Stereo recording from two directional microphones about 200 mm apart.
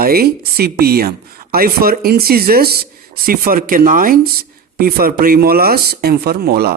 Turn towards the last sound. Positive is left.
turn(degrees=-50)  # may be behind; listen again after turning